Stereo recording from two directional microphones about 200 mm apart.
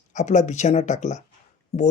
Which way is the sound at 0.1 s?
35° left (ahead or behind).